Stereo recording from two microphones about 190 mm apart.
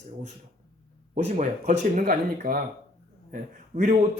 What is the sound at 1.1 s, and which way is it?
A man's voice, 40° right (ahead or behind).